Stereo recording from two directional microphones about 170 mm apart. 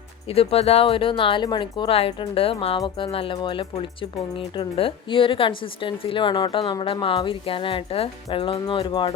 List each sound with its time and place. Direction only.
0.3 s a woman's voice: 35° left (ahead or behind)